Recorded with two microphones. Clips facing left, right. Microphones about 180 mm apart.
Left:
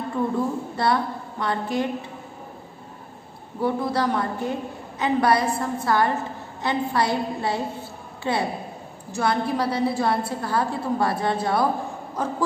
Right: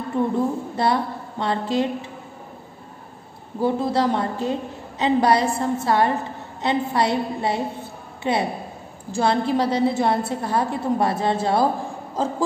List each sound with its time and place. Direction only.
0.1 s a woman's voice: 20° right (ahead or behind)
3.6 s a woman's voice: 25° right (ahead or behind)